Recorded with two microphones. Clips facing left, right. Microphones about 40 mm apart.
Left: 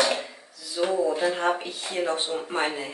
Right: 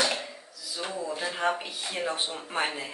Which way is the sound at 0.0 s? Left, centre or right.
Centre.